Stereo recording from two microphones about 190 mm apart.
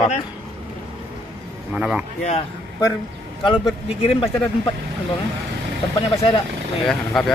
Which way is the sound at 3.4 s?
30° left (ahead or behind).